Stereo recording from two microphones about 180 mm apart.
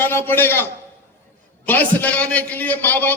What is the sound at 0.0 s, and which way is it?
A man's voice, 10° left (ahead or behind).